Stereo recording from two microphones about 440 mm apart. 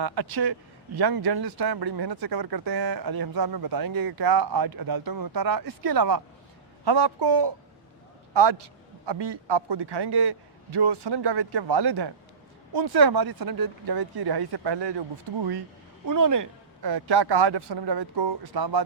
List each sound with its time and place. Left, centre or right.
0.0 s a man's voice: right
6.8 s a man's voice: right
16.0 s a man's voice: right
16.9 s a man's voice: right